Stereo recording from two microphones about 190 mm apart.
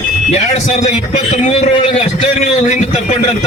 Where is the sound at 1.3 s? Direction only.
35° left (ahead or behind).